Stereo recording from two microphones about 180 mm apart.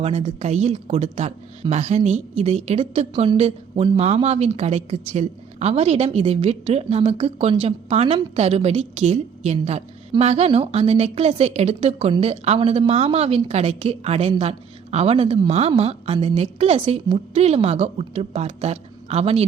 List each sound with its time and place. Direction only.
0.0 s a woman's voice: 35° right (ahead or behind)